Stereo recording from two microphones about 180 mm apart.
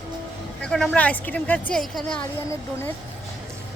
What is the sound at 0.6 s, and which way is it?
Speech, 5° left (ahead or behind).